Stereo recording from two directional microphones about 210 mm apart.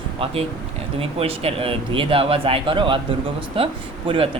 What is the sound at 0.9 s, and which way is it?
Speech, 30° right (ahead or behind).